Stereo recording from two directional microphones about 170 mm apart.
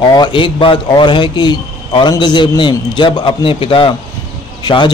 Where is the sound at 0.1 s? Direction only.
25° left (ahead or behind).